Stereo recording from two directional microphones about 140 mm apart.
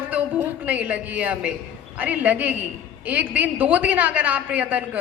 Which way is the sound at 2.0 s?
10° right (ahead or behind).